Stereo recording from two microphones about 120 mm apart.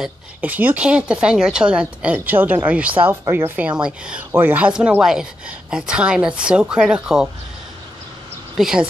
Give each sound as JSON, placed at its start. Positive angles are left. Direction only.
{"t": 0.4, "sound": "speech", "side_deg": -15}
{"t": 8.5, "sound": "speech", "side_deg": -5}